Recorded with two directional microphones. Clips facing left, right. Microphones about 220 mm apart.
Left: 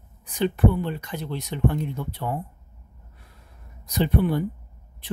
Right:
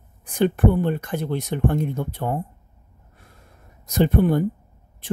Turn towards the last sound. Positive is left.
turn(degrees=-45)  # may be behind; listen again after turning